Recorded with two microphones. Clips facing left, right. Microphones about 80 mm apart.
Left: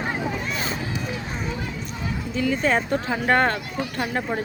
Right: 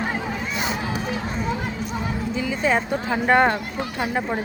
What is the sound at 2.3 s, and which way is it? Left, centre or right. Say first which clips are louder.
Speech: left 1 dB; centre.